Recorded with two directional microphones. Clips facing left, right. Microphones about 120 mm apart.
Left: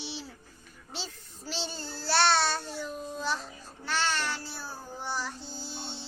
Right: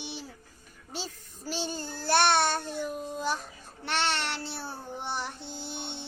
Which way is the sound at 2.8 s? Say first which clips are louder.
Right 3 dB; 5° right (ahead or behind).